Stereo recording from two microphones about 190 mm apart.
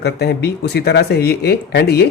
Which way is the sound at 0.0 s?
60° left (ahead or behind).